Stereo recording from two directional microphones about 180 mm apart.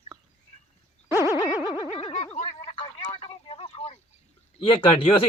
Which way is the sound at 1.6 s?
25° left (ahead or behind).